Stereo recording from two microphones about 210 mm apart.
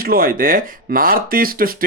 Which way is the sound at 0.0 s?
45° right (ahead or behind).